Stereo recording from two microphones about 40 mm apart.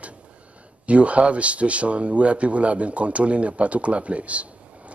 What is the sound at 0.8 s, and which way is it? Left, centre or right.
Speech, right.